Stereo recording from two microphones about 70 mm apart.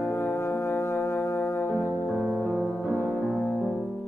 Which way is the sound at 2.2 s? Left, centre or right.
Right.